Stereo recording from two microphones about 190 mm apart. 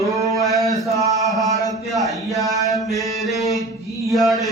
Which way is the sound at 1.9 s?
Centre (ahead or behind).